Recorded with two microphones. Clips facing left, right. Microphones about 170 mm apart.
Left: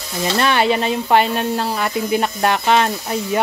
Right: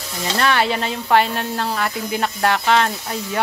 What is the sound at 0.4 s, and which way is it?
Speech, 20° left (ahead or behind).